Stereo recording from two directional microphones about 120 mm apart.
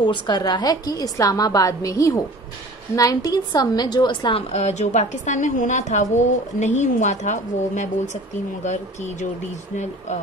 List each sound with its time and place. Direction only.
0.0 s a woman's voice: 40° left (ahead or behind); by 9.3 s 75° left (ahead or behind)